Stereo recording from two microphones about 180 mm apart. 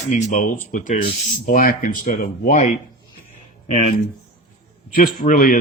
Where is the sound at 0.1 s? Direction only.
45° left (ahead or behind).